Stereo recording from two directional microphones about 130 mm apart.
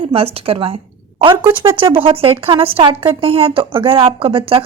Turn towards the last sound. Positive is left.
turn(degrees=-45)  # may be behind; listen again after turning